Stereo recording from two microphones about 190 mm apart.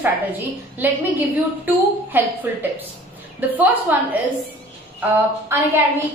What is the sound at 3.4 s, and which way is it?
Speech, 10° right (ahead or behind).